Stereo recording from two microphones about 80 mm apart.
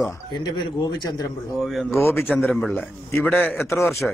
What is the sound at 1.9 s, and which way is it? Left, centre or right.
Speech, left.